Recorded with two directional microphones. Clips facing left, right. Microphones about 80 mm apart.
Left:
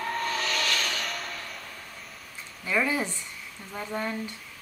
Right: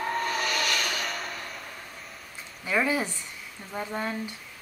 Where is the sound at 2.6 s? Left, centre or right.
Centre.